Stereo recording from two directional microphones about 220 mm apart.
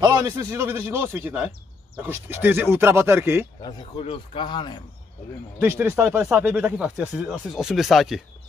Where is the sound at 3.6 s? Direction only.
20° left (ahead or behind).